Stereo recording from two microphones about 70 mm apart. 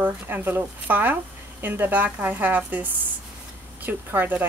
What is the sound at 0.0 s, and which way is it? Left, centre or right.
Speech, right.